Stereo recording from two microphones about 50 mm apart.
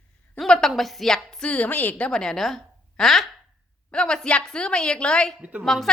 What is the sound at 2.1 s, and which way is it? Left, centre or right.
A woman's voice, centre.